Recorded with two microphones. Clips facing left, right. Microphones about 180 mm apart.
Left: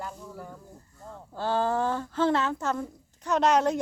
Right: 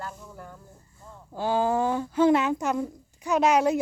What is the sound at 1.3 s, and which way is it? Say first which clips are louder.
A woman's voice: right 2 dB; 10° right (ahead or behind).